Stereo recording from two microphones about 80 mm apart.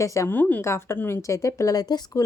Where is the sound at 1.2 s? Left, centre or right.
Left.